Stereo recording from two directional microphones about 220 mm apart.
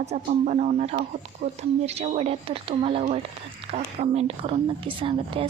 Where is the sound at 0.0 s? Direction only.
30° right (ahead or behind).